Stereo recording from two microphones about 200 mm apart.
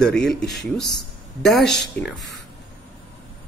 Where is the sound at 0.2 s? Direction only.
Centre (ahead or behind).